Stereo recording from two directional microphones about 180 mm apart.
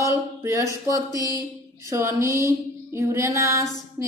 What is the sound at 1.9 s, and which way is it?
Female singing, 15° right (ahead or behind).